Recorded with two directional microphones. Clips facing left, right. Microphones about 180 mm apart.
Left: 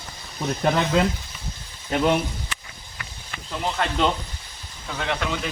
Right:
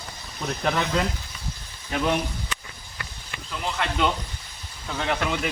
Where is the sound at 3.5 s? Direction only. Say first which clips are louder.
Left 3 dB; 30° left (ahead or behind).